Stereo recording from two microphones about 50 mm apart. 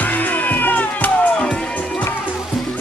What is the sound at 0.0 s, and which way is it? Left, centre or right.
Music, left.